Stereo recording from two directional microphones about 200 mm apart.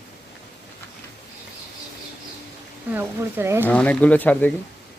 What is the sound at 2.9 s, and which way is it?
Speech, 10° right (ahead or behind).